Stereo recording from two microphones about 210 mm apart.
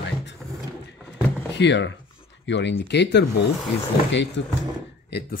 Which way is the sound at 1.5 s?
55° left (ahead or behind).